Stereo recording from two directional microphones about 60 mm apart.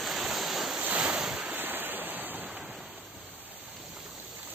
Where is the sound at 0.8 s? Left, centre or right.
Right.